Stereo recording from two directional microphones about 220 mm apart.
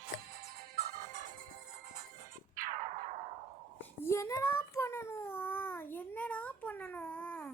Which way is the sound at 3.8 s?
10° left (ahead or behind).